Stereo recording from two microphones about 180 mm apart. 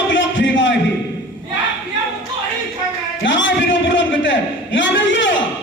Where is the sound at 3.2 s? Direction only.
90° left.